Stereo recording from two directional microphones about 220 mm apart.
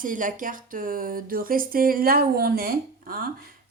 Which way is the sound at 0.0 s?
35° right (ahead or behind).